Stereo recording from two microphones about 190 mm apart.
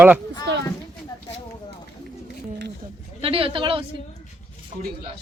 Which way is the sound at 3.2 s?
30° right (ahead or behind).